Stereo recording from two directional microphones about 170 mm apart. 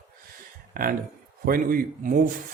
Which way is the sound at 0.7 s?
55° right (ahead or behind).